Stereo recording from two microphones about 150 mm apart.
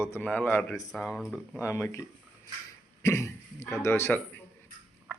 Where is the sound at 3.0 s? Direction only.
20° left (ahead or behind).